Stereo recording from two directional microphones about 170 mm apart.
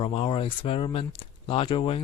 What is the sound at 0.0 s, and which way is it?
Speech, 35° left (ahead or behind).